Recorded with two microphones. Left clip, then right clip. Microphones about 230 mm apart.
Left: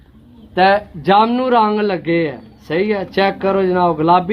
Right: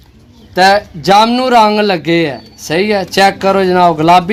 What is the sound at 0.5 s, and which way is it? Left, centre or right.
A man's voice, right.